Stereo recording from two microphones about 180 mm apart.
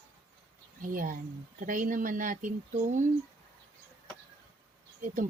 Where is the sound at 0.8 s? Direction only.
50° right (ahead or behind).